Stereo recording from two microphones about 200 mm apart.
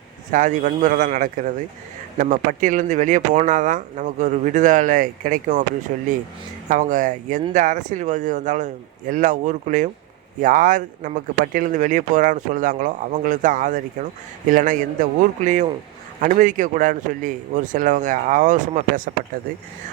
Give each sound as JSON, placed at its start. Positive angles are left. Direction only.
{"t": 0.3, "sound": "speech", "side_deg": -40}